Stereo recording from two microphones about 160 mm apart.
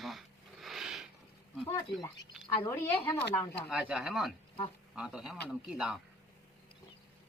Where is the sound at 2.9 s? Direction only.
35° left (ahead or behind).